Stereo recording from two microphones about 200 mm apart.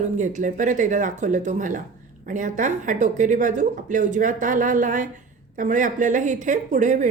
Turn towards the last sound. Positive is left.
turn(degrees=-35)  # may be behind; listen again after turning